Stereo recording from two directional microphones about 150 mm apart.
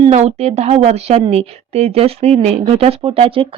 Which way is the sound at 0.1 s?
45° right (ahead or behind).